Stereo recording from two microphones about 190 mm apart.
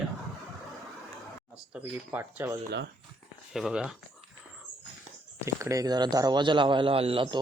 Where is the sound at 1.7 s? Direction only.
10° right (ahead or behind).